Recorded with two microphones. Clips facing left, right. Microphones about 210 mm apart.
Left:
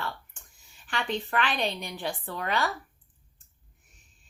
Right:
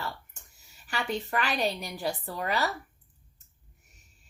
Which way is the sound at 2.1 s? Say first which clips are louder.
Right 2 dB; 35° right (ahead or behind).